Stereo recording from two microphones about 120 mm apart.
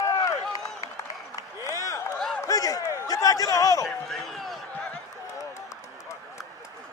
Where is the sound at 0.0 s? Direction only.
30° left (ahead or behind).